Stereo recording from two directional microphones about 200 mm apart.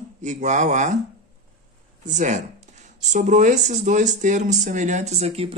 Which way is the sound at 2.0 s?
35° right (ahead or behind).